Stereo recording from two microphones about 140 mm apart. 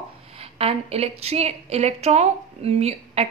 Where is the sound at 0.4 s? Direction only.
45° right (ahead or behind).